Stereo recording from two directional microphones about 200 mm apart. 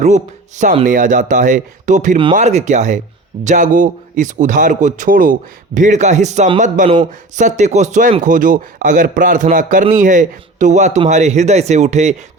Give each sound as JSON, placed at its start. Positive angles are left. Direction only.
{"t": 0.0, "sound": "speech", "side_deg": -35}